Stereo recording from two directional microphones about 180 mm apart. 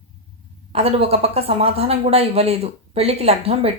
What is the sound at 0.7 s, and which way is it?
Speech, 35° right (ahead or behind).